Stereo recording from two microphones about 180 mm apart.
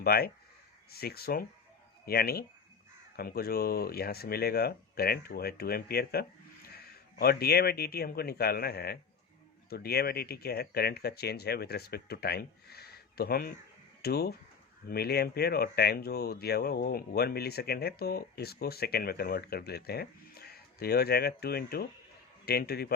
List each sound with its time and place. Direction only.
0.0 s speech: 60° left (ahead or behind)